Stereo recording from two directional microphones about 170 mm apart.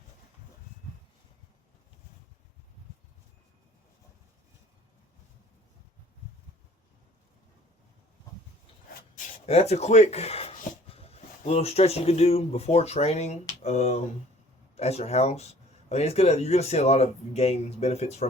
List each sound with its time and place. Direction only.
9.5 s speech: 40° left (ahead or behind)